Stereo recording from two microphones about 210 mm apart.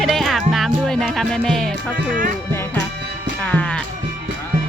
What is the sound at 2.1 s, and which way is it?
Speech, 40° right (ahead or behind).